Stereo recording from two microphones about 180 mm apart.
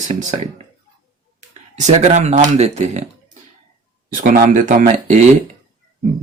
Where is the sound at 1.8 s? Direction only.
40° right (ahead or behind).